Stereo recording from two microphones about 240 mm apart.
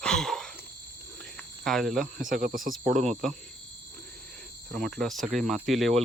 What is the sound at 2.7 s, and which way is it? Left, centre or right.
Speech, centre.